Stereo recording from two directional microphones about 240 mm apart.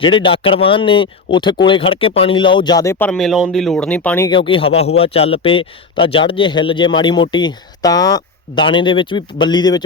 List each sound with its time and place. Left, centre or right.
0.0 s a man's voice: left
4.3 s a man's voice: left